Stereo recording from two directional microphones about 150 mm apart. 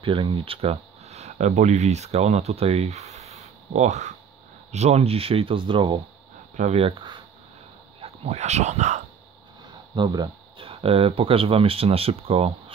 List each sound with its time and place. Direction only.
0.0 s speech: 35° right (ahead or behind)
6.5 s speech: 50° right (ahead or behind)
9.9 s speech: 30° right (ahead or behind)